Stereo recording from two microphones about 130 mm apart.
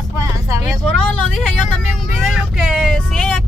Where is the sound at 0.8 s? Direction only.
5° left (ahead or behind).